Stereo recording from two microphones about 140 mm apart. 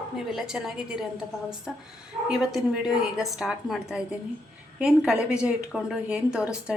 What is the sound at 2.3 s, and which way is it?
A woman's voice, 5° right (ahead or behind).